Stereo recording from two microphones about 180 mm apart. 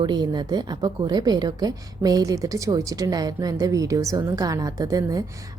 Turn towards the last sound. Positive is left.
turn(degrees=-20)  # may be behind; listen again after turning